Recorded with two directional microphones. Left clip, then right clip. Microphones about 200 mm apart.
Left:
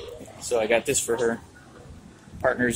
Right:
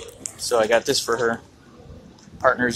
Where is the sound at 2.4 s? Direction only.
15° left (ahead or behind).